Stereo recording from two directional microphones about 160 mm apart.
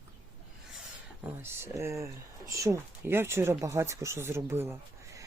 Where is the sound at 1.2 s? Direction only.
15° right (ahead or behind).